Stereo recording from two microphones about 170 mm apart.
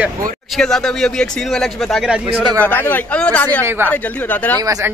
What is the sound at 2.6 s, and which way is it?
Speech, 10° left (ahead or behind).